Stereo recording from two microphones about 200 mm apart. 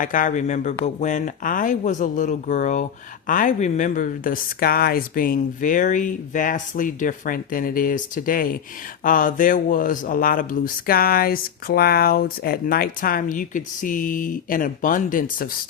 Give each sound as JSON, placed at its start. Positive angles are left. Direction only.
{"t": 0.0, "sound": "speech", "side_deg": 40}